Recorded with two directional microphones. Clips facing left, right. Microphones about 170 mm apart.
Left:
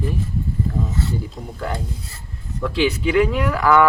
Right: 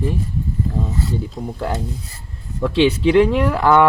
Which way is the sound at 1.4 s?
25° right (ahead or behind).